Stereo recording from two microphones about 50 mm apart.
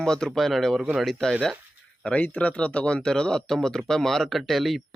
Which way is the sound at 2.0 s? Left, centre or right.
Left.